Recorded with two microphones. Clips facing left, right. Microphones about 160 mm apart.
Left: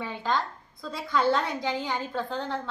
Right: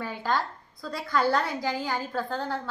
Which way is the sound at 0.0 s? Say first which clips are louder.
Even; 5° right (ahead or behind).